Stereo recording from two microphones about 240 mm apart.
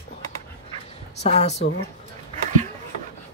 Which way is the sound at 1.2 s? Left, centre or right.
Left.